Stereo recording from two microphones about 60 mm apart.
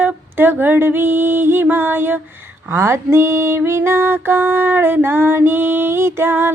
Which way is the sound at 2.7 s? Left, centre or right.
Right.